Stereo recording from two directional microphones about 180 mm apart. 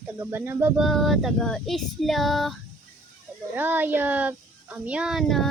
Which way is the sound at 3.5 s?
10° right (ahead or behind).